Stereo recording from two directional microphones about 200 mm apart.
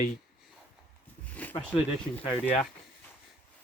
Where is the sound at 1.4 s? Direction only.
5° left (ahead or behind).